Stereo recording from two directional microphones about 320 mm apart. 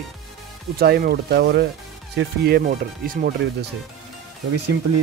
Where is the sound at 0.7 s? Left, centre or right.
Right.